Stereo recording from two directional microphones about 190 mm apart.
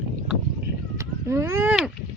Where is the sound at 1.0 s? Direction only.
15° right (ahead or behind).